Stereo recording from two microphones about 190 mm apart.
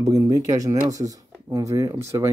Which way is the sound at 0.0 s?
20° right (ahead or behind).